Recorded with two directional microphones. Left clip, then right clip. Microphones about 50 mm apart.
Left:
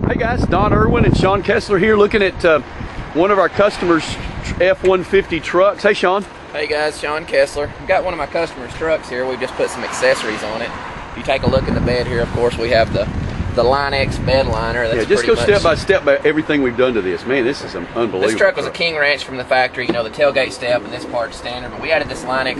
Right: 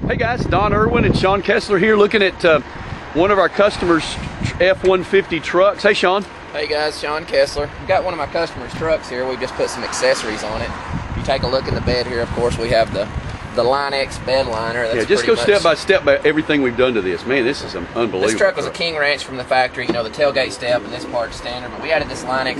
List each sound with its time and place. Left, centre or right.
0.1 s speech: left
6.5 s speech: centre
8.8 s speech: centre
10.1 s speech: left
11.3 s speech: centre
12.4 s speech: left
16.1 s speech: centre